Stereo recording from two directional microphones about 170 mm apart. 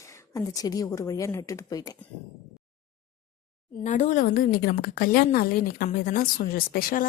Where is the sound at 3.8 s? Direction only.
45° left (ahead or behind).